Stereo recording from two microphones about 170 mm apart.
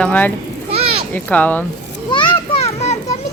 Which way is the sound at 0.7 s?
35° right (ahead or behind).